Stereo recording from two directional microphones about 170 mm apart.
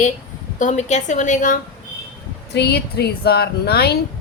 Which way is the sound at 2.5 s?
70° left (ahead or behind).